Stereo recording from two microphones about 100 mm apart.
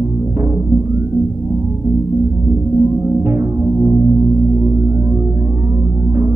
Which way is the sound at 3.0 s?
25° right (ahead or behind).